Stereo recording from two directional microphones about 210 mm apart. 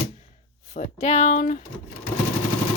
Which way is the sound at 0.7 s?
35° left (ahead or behind).